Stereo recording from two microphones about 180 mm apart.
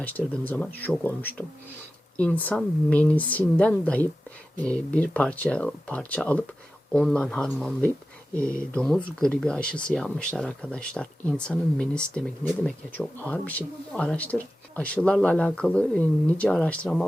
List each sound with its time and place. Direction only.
0.0 s a woman's voice: 10° left (ahead or behind)